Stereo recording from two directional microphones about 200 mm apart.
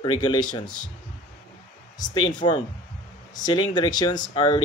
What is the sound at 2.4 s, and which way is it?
Speech, 30° left (ahead or behind).